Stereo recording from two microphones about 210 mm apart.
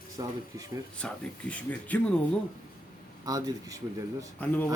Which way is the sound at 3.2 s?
20° right (ahead or behind).